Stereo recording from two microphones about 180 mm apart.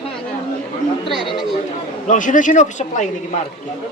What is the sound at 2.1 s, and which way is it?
Speech, 45° left (ahead or behind).